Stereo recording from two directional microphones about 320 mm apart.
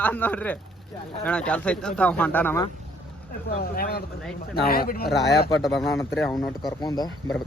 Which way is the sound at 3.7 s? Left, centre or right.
Left.